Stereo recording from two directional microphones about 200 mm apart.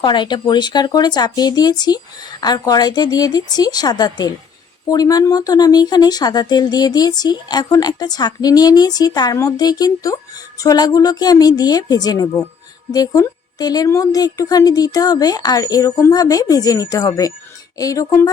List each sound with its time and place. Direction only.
0.0 s a woman's voice: 25° left (ahead or behind)